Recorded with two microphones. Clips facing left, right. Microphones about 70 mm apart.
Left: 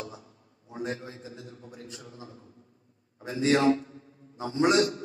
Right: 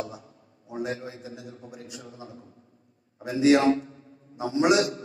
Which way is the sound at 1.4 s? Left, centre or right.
Right.